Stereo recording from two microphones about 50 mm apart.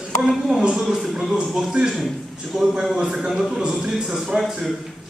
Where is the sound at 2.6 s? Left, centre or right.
Centre.